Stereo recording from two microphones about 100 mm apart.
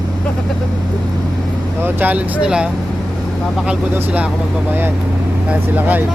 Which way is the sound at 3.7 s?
10° right (ahead or behind).